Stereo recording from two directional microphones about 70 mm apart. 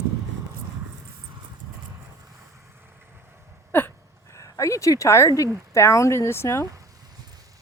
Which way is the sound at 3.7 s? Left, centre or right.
Left.